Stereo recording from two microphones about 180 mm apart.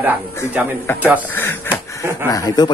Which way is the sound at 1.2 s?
10° left (ahead or behind).